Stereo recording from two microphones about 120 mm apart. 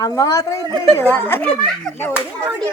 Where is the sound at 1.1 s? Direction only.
15° left (ahead or behind).